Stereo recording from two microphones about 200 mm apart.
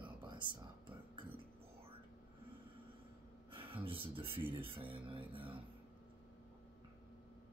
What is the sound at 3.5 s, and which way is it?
Speech, 25° right (ahead or behind).